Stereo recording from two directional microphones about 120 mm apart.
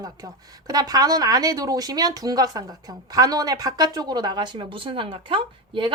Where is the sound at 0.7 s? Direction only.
35° right (ahead or behind).